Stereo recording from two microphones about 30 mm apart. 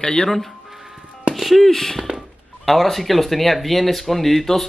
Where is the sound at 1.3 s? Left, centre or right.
Centre.